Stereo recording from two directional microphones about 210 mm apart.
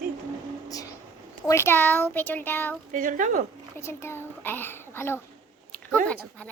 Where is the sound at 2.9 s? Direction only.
40° right (ahead or behind).